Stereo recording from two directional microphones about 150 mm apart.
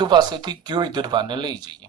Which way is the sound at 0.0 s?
30° right (ahead or behind).